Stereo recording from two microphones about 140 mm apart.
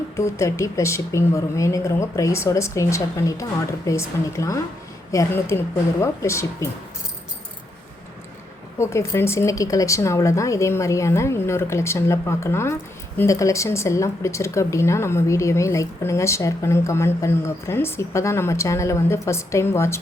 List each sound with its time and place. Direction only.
0.2 s a woman's voice: 20° left (ahead or behind)
8.8 s a woman's voice: 20° left (ahead or behind)